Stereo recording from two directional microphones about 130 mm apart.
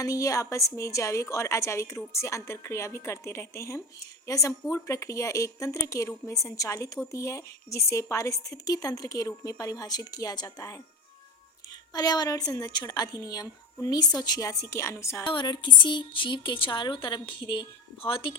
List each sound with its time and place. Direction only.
0.0 s a woman's voice: 25° left (ahead or behind)
15.2 s a woman's voice: 35° left (ahead or behind)